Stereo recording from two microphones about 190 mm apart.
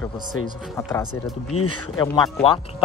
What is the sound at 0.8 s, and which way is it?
Speech, 15° left (ahead or behind).